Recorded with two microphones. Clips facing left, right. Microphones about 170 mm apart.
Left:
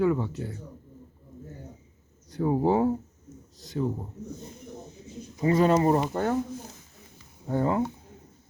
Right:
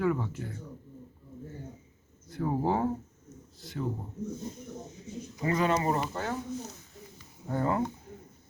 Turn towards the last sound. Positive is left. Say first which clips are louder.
# left 3 dB
turn(degrees=10)  # may be behind; listen again after turning